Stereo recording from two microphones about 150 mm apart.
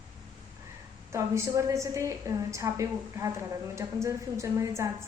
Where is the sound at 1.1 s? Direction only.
20° right (ahead or behind).